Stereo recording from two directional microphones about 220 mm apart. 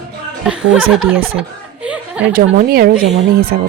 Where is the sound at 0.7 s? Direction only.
Centre (ahead or behind).